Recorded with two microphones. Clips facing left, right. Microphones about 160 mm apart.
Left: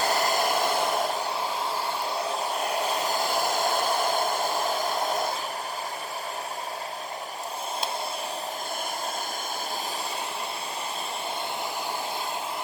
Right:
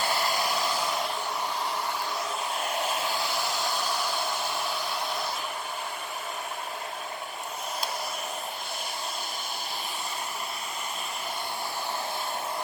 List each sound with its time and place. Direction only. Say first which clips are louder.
0.0 s hair dryer: left 4 dB; 45° left (ahead or behind)
2.6 s hair dryer: left 1 dB; 40° left (ahead or behind)